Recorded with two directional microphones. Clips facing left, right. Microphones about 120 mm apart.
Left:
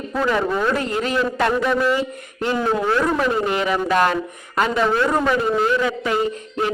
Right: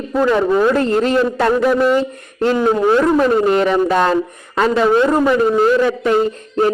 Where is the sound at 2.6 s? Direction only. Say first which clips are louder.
Right 6 dB; 20° right (ahead or behind).